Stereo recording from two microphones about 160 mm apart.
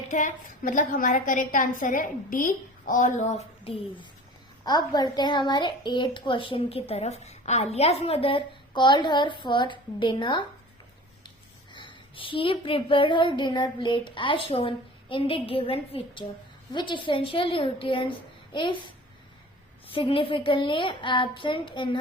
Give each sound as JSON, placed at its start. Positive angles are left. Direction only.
{"t": 0.1, "sound": "a woman's voice", "side_deg": 55}
{"t": 3.7, "sound": "a woman's voice", "side_deg": 35}
{"t": 11.7, "sound": "a woman's voice", "side_deg": 30}
{"t": 19.9, "sound": "a woman's voice", "side_deg": 35}